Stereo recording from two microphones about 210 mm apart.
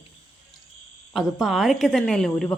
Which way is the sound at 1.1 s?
Centre (ahead or behind).